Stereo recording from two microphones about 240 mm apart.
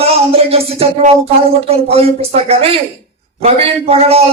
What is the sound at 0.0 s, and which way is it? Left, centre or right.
A man's voice, right.